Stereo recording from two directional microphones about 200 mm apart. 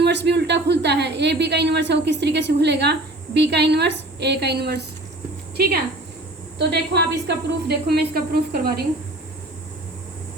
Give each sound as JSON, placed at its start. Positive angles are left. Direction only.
{"t": 0.0, "sound": "speech", "side_deg": -60}
{"t": 6.6, "sound": "speech", "side_deg": -55}